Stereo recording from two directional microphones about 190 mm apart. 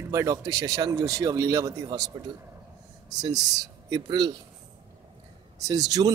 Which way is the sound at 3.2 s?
20° right (ahead or behind).